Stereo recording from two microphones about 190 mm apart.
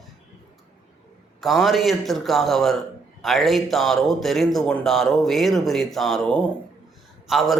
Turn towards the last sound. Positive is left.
turn(degrees=0)  # may be behind; listen again after turning